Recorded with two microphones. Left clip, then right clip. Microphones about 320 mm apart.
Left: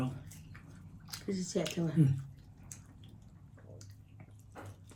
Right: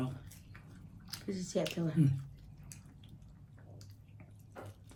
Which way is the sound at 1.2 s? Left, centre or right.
Centre.